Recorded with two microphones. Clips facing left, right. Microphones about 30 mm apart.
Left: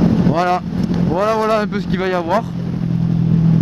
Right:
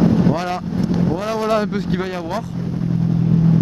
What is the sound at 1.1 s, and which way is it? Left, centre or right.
Speech, left.